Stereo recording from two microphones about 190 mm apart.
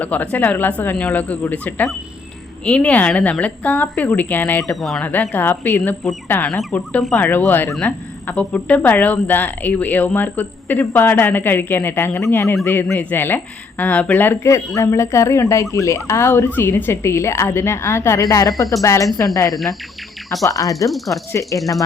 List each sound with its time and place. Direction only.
0.0 s speech: 10° left (ahead or behind)